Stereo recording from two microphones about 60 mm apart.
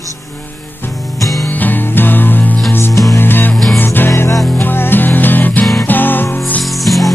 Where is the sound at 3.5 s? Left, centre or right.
Centre.